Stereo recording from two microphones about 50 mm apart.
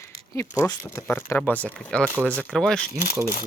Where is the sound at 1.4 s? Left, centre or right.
Left.